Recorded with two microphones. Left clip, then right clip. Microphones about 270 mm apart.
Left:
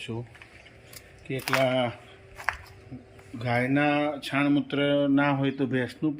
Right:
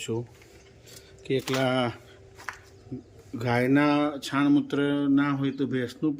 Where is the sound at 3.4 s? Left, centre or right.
Centre.